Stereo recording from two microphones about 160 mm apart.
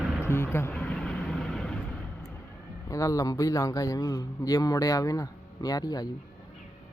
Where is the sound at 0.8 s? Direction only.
5° left (ahead or behind).